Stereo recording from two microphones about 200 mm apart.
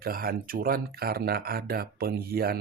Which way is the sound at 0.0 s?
50° right (ahead or behind).